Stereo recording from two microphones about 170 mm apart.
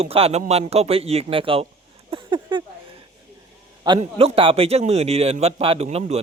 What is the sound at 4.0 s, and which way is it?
A man's voice, 35° right (ahead or behind).